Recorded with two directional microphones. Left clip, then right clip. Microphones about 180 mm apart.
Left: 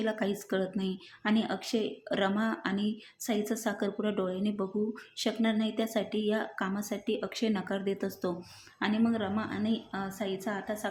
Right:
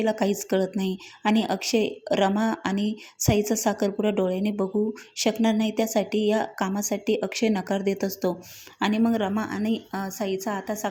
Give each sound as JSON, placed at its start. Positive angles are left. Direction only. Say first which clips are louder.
{"t": 0.0, "sound": "a woman's voice", "louder": "right 8 dB", "side_deg": -25}